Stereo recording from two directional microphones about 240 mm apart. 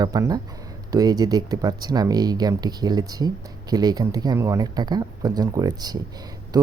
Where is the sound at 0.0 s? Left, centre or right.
Centre.